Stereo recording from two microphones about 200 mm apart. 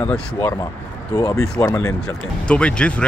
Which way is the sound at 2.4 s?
5° left (ahead or behind).